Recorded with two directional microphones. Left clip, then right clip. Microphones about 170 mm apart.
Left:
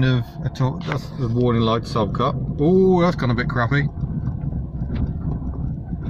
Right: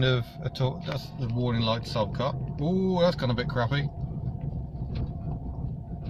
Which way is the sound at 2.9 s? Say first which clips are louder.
Left 5 dB; centre (ahead or behind).